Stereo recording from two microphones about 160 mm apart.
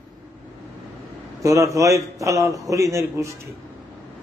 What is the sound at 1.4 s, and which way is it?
A man's voice, 20° right (ahead or behind).